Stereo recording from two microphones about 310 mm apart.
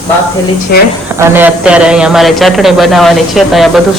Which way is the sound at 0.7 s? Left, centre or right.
Left.